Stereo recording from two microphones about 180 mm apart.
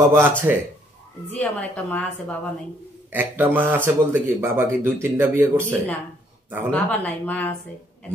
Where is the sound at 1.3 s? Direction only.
10° left (ahead or behind).